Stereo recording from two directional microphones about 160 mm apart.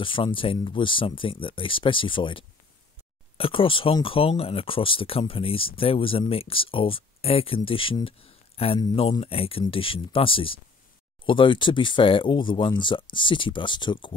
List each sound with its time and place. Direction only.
0.0 s speech: 35° left (ahead or behind)
9.2 s speech: 35° left (ahead or behind)